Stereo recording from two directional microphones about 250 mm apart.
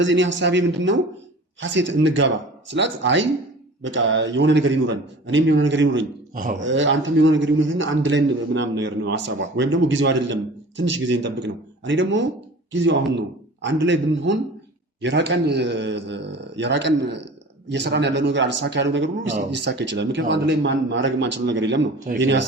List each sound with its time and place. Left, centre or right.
0.0 s a man's voice: right
6.3 s speech: right
6.6 s a man's voice: right